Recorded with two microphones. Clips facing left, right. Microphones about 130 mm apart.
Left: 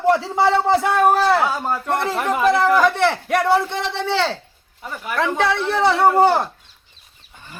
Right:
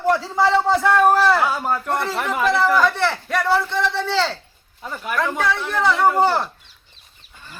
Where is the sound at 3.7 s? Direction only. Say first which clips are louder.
Right 1 dB; 60° left (ahead or behind).